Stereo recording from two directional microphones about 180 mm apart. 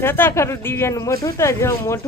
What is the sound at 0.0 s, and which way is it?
Speech, 10° left (ahead or behind).